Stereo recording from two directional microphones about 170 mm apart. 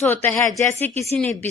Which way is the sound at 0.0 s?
10° left (ahead or behind).